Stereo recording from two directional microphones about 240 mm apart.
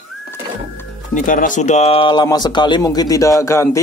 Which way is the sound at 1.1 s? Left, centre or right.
Left.